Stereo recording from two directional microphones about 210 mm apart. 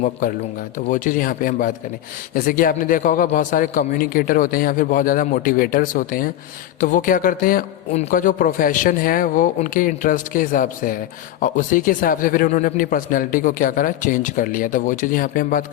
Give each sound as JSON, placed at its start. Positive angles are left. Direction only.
{"t": 0.9, "sound": "a man's voice", "side_deg": 40}